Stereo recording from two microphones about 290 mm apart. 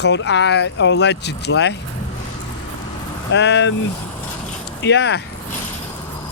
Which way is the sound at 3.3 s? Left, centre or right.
Left.